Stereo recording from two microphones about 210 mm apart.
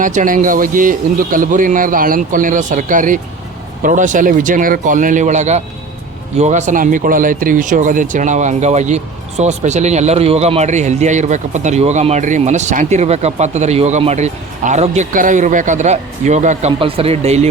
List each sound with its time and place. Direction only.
0.0 s speech: 35° right (ahead or behind)